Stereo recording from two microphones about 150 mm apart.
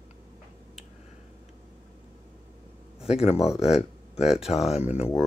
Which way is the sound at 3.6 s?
5° right (ahead or behind).